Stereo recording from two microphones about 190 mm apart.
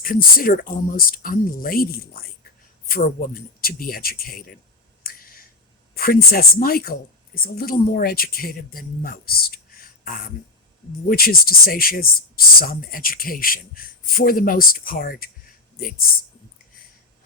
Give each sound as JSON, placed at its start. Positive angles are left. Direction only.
{"t": 0.0, "sound": "speech", "side_deg": 50}
{"t": 5.0, "sound": "a sound", "side_deg": 50}
{"t": 5.9, "sound": "speech", "side_deg": 50}